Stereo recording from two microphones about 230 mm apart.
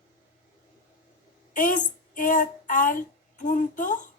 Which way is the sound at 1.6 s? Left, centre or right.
Left.